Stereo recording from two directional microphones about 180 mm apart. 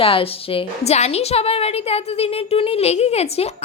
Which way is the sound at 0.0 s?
30° left (ahead or behind).